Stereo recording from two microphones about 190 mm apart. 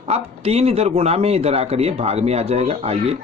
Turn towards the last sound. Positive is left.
turn(degrees=-30)  # may be behind; listen again after turning